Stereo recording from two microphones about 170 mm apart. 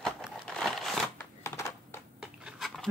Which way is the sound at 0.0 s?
5° left (ahead or behind).